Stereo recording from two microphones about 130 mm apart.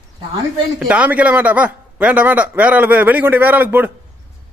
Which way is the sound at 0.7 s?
10° right (ahead or behind).